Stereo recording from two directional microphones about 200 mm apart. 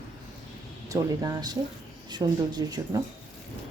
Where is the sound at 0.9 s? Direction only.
20° right (ahead or behind).